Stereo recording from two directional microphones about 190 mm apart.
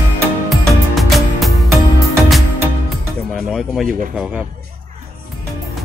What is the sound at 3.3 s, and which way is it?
Speech, centre (ahead or behind).